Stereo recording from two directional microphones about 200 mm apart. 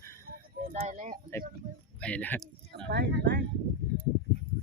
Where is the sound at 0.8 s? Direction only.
35° right (ahead or behind).